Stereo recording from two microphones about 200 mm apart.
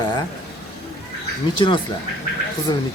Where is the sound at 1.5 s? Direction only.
25° left (ahead or behind).